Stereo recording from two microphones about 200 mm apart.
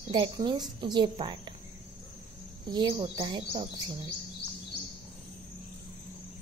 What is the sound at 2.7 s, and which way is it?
Speech, 20° right (ahead or behind).